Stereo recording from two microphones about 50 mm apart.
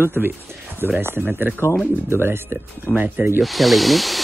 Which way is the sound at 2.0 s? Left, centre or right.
Right.